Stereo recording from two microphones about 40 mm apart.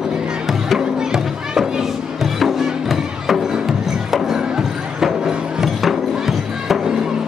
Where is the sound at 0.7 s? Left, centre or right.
Centre.